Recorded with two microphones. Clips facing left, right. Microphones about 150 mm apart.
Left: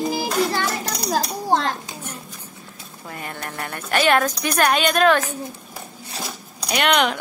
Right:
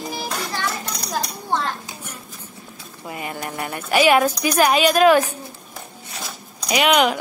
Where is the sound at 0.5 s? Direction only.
35° left (ahead or behind).